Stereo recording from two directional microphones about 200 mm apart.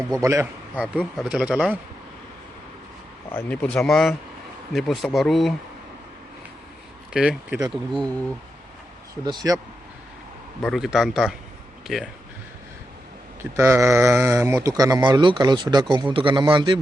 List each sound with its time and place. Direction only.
0.1 s speech: 15° right (ahead or behind)
0.9 s speech: 5° right (ahead or behind)
3.3 s speech: 5° left (ahead or behind)
7.1 s speech: 5° right (ahead or behind)
9.2 s speech: 20° right (ahead or behind)
10.6 s speech: centre (ahead or behind)
13.4 s speech: 15° right (ahead or behind)